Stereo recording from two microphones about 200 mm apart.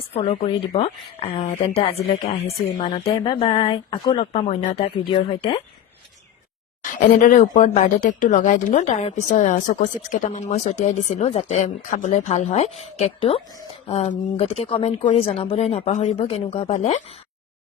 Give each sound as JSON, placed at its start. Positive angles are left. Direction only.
{"t": 0.2, "sound": "a woman's voice", "side_deg": 25}
{"t": 6.8, "sound": "speech", "side_deg": 40}